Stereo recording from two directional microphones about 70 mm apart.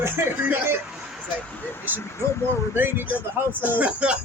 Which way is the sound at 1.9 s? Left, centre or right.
Right.